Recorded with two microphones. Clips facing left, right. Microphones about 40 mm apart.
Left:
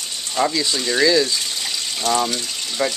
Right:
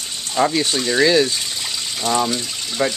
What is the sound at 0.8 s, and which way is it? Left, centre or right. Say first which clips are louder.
Speech: right 2 dB; centre.